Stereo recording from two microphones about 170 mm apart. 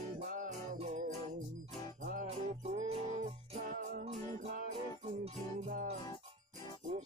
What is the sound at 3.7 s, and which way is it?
Music, 55° right (ahead or behind).